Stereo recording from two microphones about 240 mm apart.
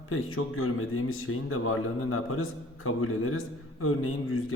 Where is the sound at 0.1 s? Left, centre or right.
Left.